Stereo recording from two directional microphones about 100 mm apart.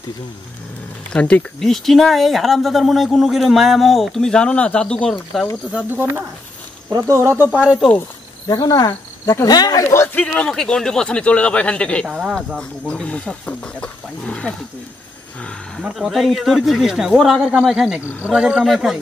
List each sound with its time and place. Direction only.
1.1 s speech: 10° left (ahead or behind)
5.7 s speech: 15° right (ahead or behind)
6.9 s speech: 35° right (ahead or behind)
7.5 s speech: centre (ahead or behind)
8.5 s speech: 45° left (ahead or behind)
10.0 s speech: 15° left (ahead or behind)
12.1 s speech: 10° right (ahead or behind)
12.5 s speech: 10° left (ahead or behind)
15.8 s speech: centre (ahead or behind)